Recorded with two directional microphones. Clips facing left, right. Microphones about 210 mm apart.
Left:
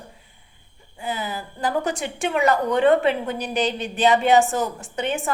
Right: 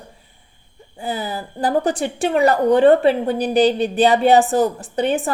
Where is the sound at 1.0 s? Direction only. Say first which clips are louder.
Right 3 dB; 35° right (ahead or behind).